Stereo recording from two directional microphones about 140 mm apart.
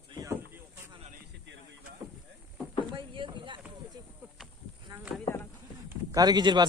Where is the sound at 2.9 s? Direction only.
35° right (ahead or behind).